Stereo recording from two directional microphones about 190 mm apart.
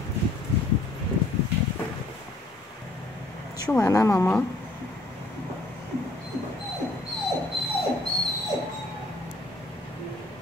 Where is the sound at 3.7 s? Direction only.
15° left (ahead or behind).